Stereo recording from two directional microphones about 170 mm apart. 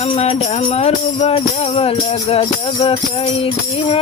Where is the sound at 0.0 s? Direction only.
40° left (ahead or behind).